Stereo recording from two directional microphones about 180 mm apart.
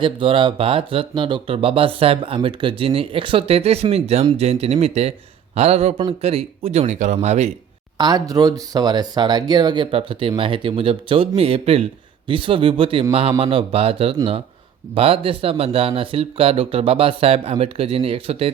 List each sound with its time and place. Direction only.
0.0 s speech: 30° right (ahead or behind)
7.9 s speech: 20° right (ahead or behind)